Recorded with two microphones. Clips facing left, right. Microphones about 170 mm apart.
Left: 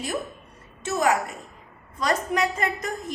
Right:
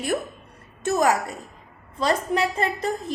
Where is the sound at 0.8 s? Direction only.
45° right (ahead or behind).